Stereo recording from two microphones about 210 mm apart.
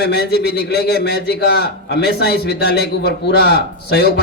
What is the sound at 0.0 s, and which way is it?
A man's voice, 50° left (ahead or behind).